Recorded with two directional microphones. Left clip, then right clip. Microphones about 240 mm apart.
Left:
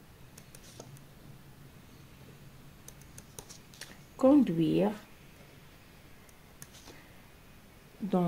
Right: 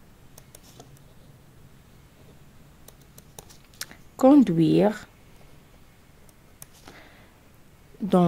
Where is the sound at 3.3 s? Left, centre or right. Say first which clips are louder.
Right 8 dB; right.